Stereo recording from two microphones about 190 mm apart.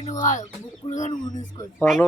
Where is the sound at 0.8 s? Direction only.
40° left (ahead or behind).